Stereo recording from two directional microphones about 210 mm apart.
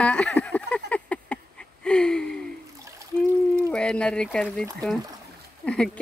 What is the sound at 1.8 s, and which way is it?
Speech, 5° left (ahead or behind).